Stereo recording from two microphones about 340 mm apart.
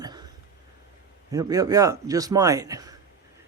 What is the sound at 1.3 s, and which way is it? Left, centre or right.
A man's voice, centre.